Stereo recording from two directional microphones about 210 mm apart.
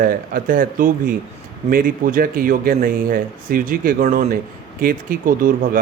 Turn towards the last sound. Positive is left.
turn(degrees=-40)  # may be behind; listen again after turning